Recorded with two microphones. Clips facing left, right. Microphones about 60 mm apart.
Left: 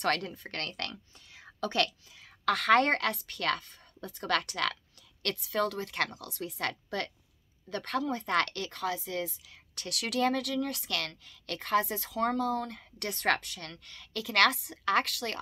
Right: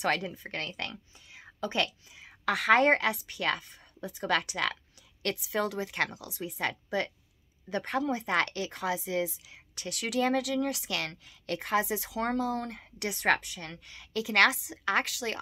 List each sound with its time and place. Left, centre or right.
0.0 s a woman's voice: centre
13.1 s a woman's voice: centre